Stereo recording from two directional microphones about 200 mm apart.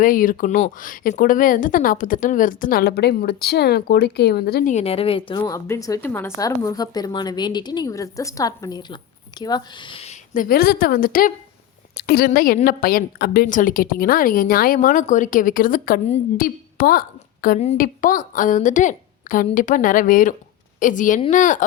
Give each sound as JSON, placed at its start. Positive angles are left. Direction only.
{"t": 0.0, "sound": "a woman's voice", "side_deg": 45}
{"t": 4.7, "sound": "a woman's voice", "side_deg": 30}
{"t": 5.4, "sound": "a woman's voice", "side_deg": 15}